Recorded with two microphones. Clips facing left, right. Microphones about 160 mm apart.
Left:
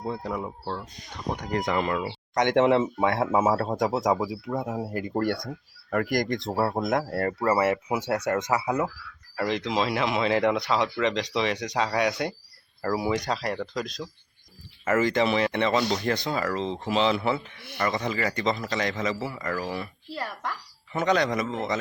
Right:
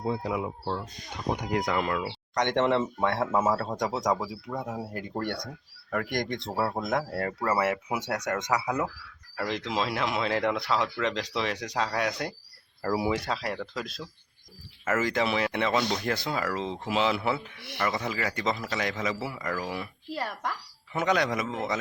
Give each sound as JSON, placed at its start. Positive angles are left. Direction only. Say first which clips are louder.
{"t": 0.0, "sound": "speech", "louder": "right 1 dB", "side_deg": -5}
{"t": 1.6, "sound": "speech", "louder": "left 2 dB", "side_deg": 0}
{"t": 4.6, "sound": "speech", "louder": "left 4 dB", "side_deg": 20}
{"t": 5.2, "sound": "a man's voice", "louder": "left 6 dB", "side_deg": 5}